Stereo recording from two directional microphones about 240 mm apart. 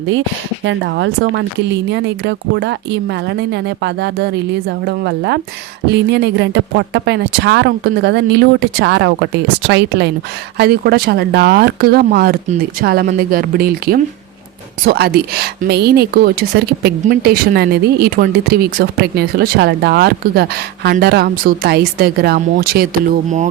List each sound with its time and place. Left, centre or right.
0.1 s speech: right